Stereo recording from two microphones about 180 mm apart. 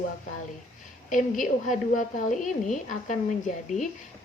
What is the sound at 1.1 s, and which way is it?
A woman's voice, 45° left (ahead or behind).